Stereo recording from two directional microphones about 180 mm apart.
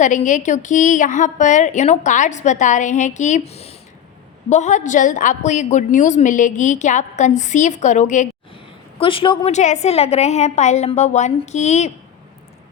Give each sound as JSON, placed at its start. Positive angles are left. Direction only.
{"t": 0.0, "sound": "a woman's voice", "side_deg": 45}
{"t": 9.0, "sound": "a woman's voice", "side_deg": 30}
{"t": 9.5, "sound": "a woman's voice", "side_deg": 40}